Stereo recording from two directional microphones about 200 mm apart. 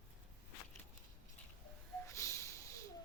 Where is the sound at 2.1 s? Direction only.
15° left (ahead or behind).